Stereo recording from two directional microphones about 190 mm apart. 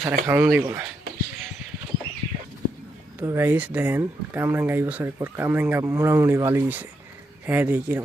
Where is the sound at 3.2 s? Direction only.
10° right (ahead or behind).